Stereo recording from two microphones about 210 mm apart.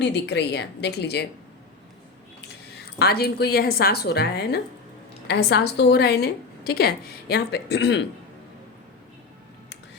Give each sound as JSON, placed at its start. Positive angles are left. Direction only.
{"t": 0.0, "sound": "a woman's voice", "side_deg": 55}
{"t": 3.0, "sound": "a woman's voice", "side_deg": 50}